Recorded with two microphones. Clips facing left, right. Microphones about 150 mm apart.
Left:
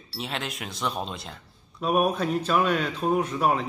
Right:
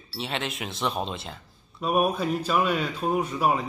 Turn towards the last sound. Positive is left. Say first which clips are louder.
# left 1 dB
turn(degrees=0)  # may be behind; listen again after turning